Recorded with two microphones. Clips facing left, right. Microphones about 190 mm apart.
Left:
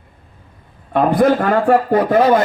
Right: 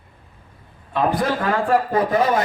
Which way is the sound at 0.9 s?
55° left (ahead or behind).